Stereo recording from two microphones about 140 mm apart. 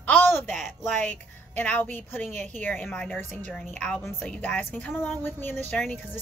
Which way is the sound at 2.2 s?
55° right (ahead or behind).